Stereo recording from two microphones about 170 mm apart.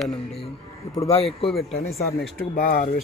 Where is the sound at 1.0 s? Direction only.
35° left (ahead or behind).